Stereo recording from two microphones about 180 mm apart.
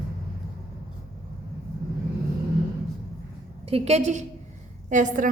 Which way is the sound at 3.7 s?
35° right (ahead or behind).